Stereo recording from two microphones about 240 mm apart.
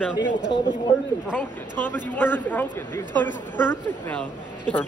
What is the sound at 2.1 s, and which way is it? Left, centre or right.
A man's voice, centre.